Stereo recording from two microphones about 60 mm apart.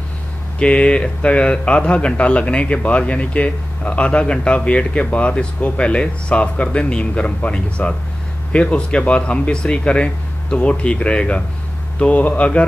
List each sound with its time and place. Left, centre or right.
0.6 s speech: centre